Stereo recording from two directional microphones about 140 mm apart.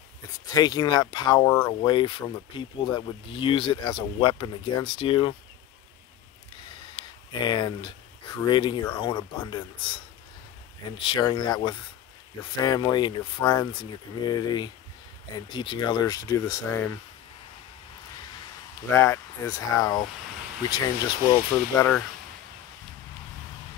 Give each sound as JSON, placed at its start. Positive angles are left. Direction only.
{"t": 0.5, "sound": "speech", "side_deg": 30}
{"t": 7.0, "sound": "a sound", "side_deg": 30}
{"t": 8.4, "sound": "speech", "side_deg": 35}
{"t": 11.0, "sound": "speech", "side_deg": 35}
{"t": 18.9, "sound": "speech", "side_deg": 20}
{"t": 21.3, "sound": "speech", "side_deg": 15}